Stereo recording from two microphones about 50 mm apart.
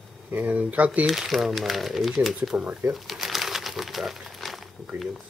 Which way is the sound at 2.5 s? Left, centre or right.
Right.